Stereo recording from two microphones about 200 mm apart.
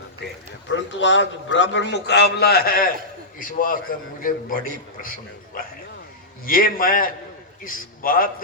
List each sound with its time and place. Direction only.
0.7 s a man's voice: 65° left (ahead or behind); by 4.6 s 45° left (ahead or behind)
6.4 s a man's voice: 45° left (ahead or behind)